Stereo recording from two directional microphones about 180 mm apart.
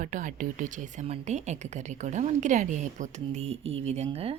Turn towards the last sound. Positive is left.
turn(degrees=-35)  # may be behind; listen again after turning